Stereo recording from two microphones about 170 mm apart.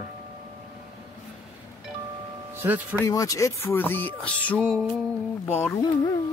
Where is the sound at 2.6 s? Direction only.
10° right (ahead or behind).